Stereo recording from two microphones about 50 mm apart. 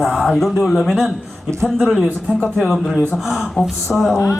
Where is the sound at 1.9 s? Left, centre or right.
Centre.